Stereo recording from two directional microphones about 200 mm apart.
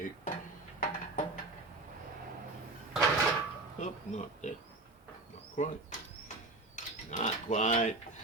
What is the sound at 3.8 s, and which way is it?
Speech, 35° left (ahead or behind).